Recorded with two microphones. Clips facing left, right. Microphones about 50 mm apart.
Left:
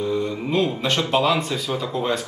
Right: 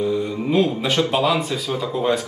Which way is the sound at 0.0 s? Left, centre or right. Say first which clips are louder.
Right 2 dB; centre.